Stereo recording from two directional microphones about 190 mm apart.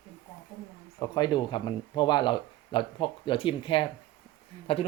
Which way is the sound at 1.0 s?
20° left (ahead or behind).